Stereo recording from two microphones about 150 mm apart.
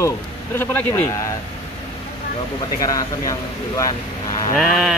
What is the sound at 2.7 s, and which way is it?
Speech, 25° left (ahead or behind).